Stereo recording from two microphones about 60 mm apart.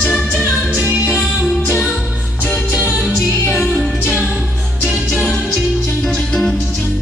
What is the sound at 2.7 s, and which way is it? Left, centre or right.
Music, right.